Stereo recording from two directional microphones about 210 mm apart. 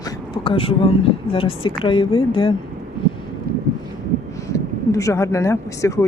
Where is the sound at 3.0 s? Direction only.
25° left (ahead or behind).